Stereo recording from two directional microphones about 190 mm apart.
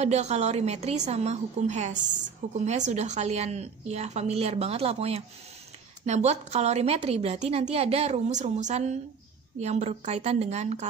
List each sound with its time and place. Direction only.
0.0 s a woman's voice: 35° right (ahead or behind)